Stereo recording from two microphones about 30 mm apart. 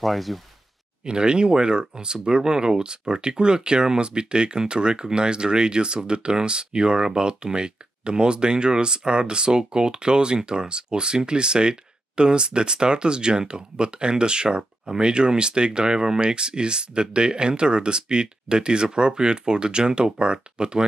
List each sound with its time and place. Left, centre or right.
0.0 s speech: centre
1.0 s speech: right